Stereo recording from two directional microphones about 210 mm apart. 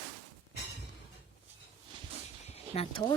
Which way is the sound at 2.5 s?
30° left (ahead or behind).